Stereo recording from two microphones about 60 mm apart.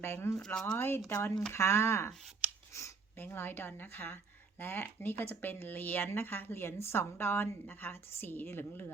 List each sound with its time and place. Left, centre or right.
0.0 s speech: left
0.3 s speech: centre
0.8 s speech: left
1.0 s speech: left
3.2 s speech: left